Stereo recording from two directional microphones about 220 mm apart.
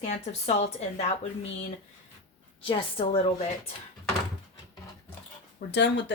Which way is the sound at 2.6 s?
25° left (ahead or behind).